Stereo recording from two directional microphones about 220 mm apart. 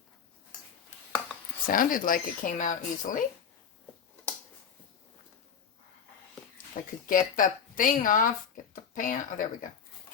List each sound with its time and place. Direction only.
1.6 s speech: 40° left (ahead or behind)
6.8 s speech: 35° left (ahead or behind)